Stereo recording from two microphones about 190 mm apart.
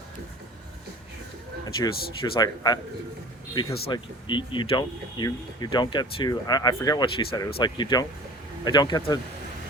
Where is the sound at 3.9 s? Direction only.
25° left (ahead or behind).